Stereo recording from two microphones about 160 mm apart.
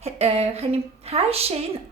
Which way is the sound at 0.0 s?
40° right (ahead or behind).